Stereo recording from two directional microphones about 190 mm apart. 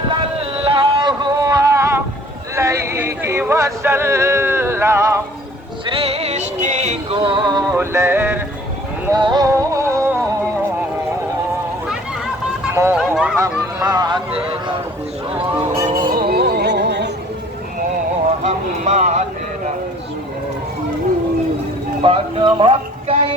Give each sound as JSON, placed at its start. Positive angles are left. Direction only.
{"t": 0.2, "sound": "a sound", "side_deg": -30}
{"t": 5.8, "sound": "music", "side_deg": -30}
{"t": 9.0, "sound": "music", "side_deg": -20}
{"t": 12.7, "sound": "speech", "side_deg": -15}
{"t": 13.4, "sound": "music", "side_deg": -20}
{"t": 15.5, "sound": "speech", "side_deg": -10}
{"t": 15.8, "sound": "music", "side_deg": -45}
{"t": 18.4, "sound": "a sound", "side_deg": -35}
{"t": 22.0, "sound": "speech", "side_deg": -25}